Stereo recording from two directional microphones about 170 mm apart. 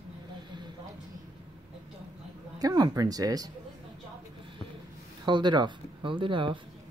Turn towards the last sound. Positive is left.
turn(degrees=-30)  # may be behind; listen again after turning